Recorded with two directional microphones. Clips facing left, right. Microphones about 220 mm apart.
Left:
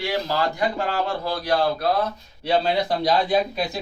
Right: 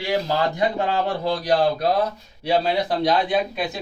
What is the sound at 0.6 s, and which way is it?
Speech, 20° right (ahead or behind).